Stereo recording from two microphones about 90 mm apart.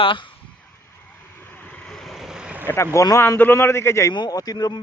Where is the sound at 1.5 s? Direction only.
15° left (ahead or behind); by 2.6 s 10° right (ahead or behind).